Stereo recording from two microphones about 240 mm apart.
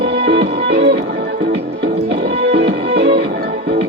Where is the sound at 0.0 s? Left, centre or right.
Right.